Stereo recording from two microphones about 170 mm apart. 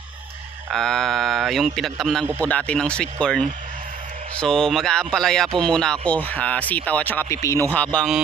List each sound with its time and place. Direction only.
0.7 s a man's voice: 5° left (ahead or behind)